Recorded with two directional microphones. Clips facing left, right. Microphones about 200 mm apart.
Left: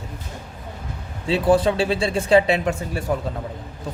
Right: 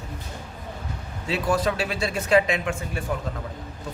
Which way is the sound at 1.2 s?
30° left (ahead or behind).